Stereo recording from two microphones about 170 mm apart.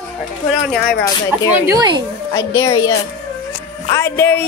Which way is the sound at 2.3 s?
20° left (ahead or behind).